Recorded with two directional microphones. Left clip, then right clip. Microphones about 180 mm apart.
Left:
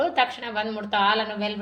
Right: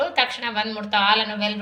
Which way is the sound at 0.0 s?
50° left (ahead or behind).